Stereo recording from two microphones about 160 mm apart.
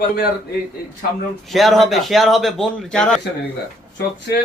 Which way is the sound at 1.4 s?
Centre (ahead or behind).